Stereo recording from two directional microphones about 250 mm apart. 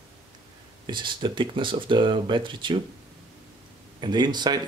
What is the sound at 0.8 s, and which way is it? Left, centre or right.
Speech, centre.